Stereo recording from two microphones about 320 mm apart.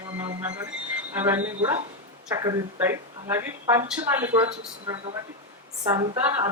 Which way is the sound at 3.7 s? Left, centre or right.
Centre.